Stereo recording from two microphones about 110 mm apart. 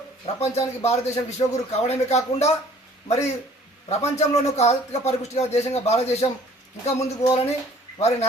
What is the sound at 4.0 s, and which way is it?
Speech, 85° left.